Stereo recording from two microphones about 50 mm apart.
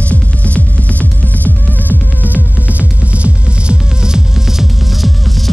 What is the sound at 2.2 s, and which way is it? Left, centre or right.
Music, right.